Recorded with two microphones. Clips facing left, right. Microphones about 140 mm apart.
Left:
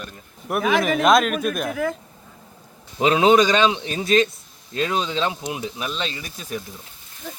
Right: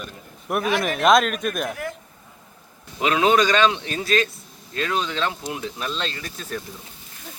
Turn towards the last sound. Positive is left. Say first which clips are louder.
# left 1 dB
turn(degrees=10)  # may be behind; listen again after turning